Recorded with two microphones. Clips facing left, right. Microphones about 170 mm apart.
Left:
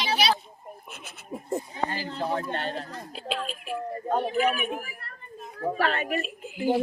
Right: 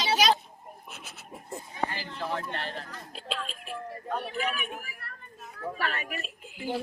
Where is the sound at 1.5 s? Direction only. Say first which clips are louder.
Left 4 dB; 40° left (ahead or behind).